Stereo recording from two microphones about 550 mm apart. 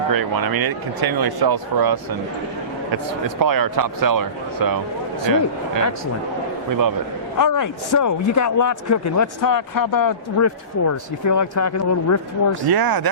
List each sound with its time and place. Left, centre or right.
0.1 s speech: right
3.2 s speech: right
7.3 s a man's voice: left
12.6 s speech: right